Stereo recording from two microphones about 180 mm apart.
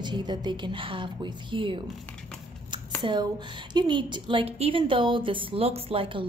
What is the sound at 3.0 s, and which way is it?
A woman's voice, 25° right (ahead or behind).